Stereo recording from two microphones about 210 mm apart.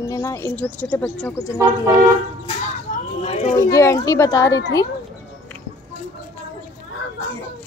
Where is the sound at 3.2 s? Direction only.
30° left (ahead or behind).